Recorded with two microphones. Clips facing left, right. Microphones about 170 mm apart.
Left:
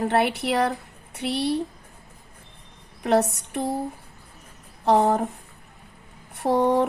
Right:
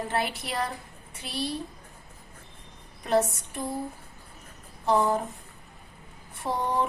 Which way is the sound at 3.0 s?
65° left (ahead or behind).